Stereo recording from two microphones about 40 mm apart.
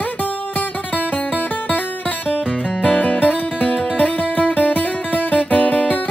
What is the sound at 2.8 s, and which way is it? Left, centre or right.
Music, left.